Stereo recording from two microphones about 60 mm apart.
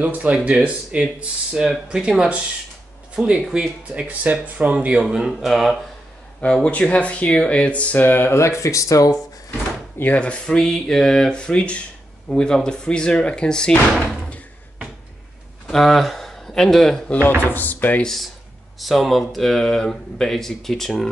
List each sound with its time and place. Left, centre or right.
0.0 s speech: right; by 3.6 s centre
3.9 s speech: right
5.0 s speech: centre
6.4 s speech: centre; by 8.4 s left
8.4 s speech: left
10.1 s speech: centre
15.6 s speech: centre
17.5 s speech: left
18.0 s speech: centre